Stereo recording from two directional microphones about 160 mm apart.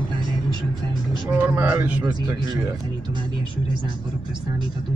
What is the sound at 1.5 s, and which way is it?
Speech, 10° right (ahead or behind).